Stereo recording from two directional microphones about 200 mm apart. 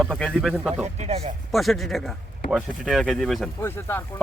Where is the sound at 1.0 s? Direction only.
30° right (ahead or behind).